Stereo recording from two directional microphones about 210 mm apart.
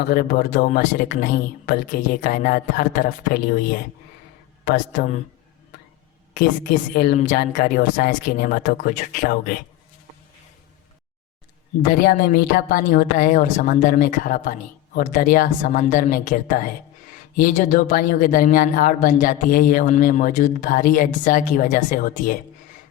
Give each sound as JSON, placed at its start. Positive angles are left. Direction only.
{"t": 0.0, "sound": "speech", "side_deg": 45}
{"t": 6.3, "sound": "speech", "side_deg": 40}
{"t": 11.8, "sound": "speech", "side_deg": 40}